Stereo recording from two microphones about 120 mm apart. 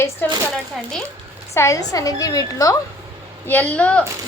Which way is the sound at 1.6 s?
25° left (ahead or behind).